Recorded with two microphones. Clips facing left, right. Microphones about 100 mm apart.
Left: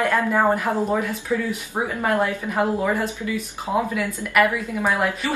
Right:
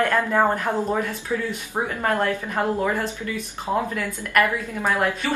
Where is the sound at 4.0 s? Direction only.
5° left (ahead or behind).